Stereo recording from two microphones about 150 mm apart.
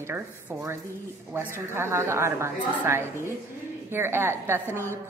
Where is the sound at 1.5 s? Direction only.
15° right (ahead or behind).